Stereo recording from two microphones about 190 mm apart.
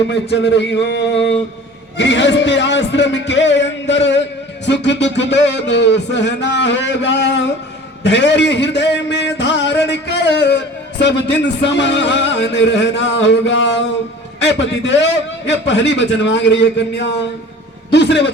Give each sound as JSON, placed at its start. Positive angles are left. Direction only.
{"t": 0.1, "sound": "a man's voice", "side_deg": 65}